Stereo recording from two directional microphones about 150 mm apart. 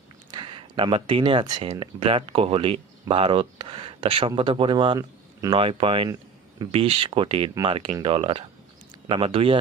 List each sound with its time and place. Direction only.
0.3 s speech: 30° right (ahead or behind)
5.5 s speech: 40° right (ahead or behind)